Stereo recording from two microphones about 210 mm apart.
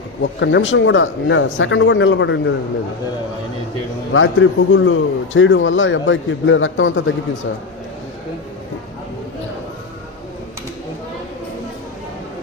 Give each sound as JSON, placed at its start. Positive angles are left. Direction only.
{"t": 0.2, "sound": "a man's voice", "side_deg": 60}
{"t": 4.1, "sound": "a man's voice", "side_deg": 70}